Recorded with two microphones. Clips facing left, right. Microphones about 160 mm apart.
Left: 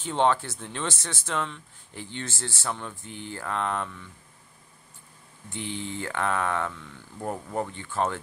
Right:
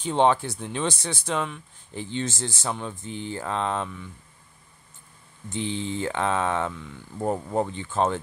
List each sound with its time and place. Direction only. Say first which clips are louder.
0.0 s speech: right 3 dB; 15° right (ahead or behind)
5.5 s speech: right 5 dB; 20° right (ahead or behind)